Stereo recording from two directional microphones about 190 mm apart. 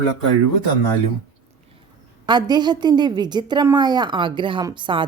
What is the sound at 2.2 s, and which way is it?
A woman's voice, 20° right (ahead or behind).